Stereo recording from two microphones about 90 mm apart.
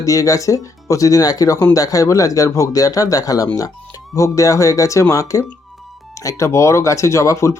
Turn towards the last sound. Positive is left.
turn(degrees=35)  # may be behind; listen again after turning